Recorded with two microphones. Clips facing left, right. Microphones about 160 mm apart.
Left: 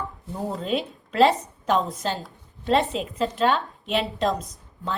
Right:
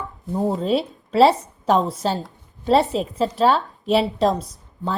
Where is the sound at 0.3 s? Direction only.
35° right (ahead or behind).